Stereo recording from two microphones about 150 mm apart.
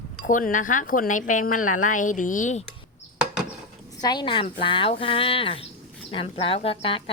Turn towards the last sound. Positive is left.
turn(degrees=35)  # may be behind; listen again after turning